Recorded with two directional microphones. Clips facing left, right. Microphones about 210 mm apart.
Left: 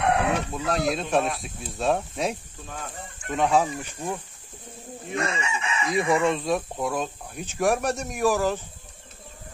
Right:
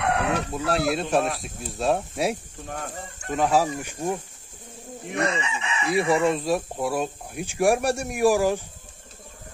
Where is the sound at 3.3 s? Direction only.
5° right (ahead or behind).